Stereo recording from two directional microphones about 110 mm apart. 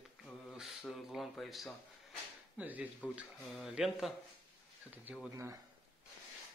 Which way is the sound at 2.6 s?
15° right (ahead or behind).